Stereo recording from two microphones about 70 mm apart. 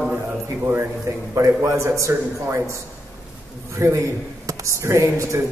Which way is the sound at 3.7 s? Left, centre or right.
Right.